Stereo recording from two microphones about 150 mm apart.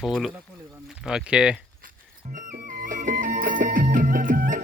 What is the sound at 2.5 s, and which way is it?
Music, 65° right (ahead or behind).